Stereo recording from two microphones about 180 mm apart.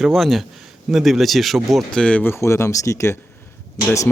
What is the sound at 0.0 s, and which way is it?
Speech, centre (ahead or behind).